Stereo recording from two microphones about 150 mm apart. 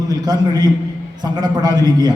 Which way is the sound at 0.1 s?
25° right (ahead or behind).